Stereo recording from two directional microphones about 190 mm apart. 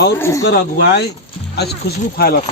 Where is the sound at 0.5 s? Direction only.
60° left (ahead or behind).